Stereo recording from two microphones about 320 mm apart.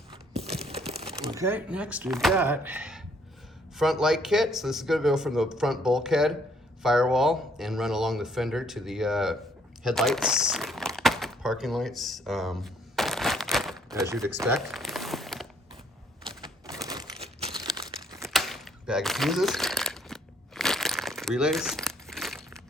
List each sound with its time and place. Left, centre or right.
0.1 s crumpling: centre
0.9 s speech: centre
9.8 s crumpling: centre
16.4 s a sound: centre
17.7 s crumpling: centre
18.3 s a sound: centre